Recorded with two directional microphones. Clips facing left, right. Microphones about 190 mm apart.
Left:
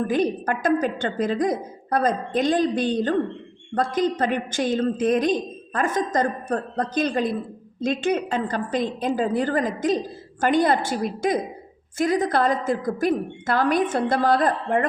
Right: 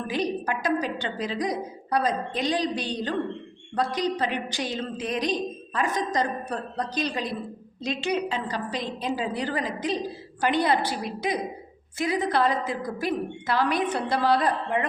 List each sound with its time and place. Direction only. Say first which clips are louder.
0.1 s a woman's voice: left 5 dB; 50° left (ahead or behind)